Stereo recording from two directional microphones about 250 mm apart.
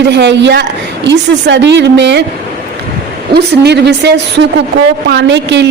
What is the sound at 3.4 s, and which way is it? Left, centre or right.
A woman's voice, right.